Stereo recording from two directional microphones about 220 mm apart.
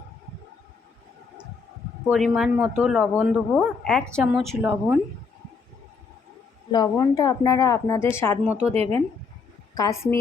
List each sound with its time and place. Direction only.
2.0 s a man's voice: centre (ahead or behind)
6.7 s speech: 20° left (ahead or behind)
8.7 s speech: 30° right (ahead or behind)
9.7 s speech: 15° left (ahead or behind)